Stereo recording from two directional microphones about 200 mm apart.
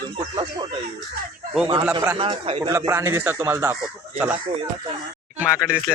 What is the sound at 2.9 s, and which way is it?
Speech, 15° right (ahead or behind).